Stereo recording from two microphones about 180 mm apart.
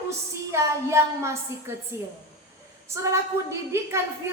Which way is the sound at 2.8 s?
15° right (ahead or behind).